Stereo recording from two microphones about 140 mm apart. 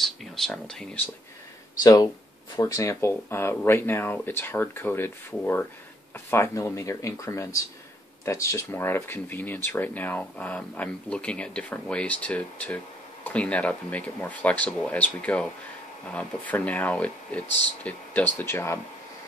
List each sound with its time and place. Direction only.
0.0 s speech: centre (ahead or behind)
1.8 s speech: 25° left (ahead or behind)